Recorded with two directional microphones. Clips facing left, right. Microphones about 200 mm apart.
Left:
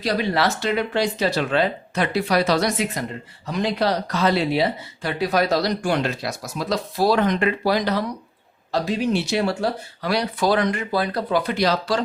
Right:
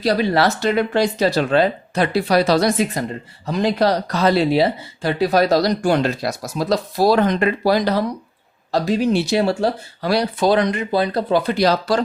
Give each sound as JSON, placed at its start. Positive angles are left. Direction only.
{"t": 0.0, "sound": "speech", "side_deg": -40}